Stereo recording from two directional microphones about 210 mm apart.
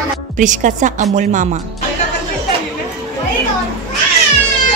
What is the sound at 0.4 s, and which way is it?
Speech, 35° right (ahead or behind).